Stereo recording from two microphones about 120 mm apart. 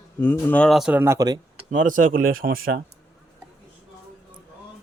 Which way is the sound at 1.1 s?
35° right (ahead or behind).